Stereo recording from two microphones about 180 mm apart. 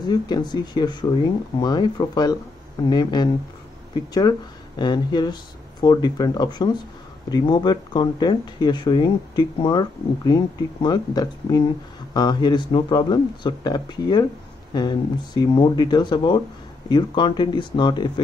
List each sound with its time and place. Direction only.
0.0 s speech: 25° left (ahead or behind)